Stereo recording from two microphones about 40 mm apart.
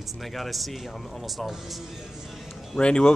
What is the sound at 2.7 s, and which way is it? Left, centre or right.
Speech, left.